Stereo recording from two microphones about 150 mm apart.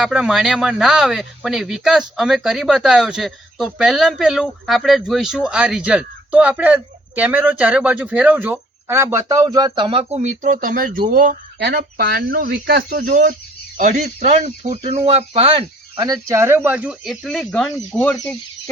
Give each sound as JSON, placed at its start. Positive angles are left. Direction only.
{"t": 0.0, "sound": "speech", "side_deg": -5}
{"t": 13.7, "sound": "speech", "side_deg": -55}